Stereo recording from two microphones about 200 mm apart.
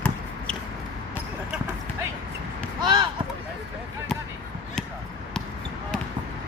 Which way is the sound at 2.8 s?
20° right (ahead or behind).